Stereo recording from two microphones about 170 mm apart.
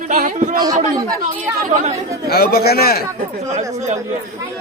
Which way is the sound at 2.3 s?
70° left (ahead or behind).